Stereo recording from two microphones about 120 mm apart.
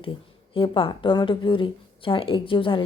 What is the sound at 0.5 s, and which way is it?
A woman's voice, 45° left (ahead or behind).